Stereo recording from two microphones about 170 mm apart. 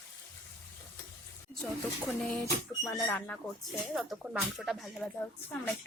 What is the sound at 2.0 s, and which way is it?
A woman's voice, 5° left (ahead or behind).